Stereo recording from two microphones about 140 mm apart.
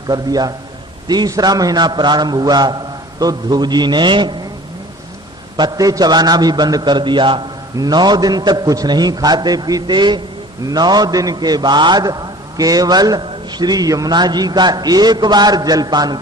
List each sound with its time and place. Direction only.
0.1 s a man's voice: 30° right (ahead or behind)
5.5 s a man's voice: 30° right (ahead or behind)